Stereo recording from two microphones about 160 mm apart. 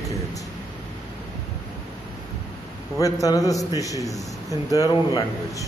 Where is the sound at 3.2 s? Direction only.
20° left (ahead or behind).